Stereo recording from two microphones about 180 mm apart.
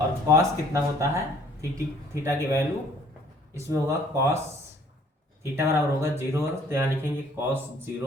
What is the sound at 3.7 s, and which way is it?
Speech, 15° right (ahead or behind).